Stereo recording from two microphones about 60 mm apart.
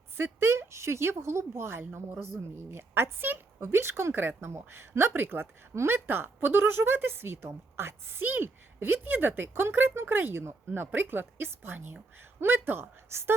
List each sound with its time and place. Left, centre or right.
0.2 s a woman's voice: right